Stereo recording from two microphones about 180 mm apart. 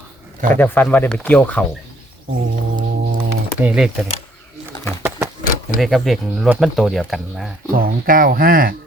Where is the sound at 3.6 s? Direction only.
5° right (ahead or behind).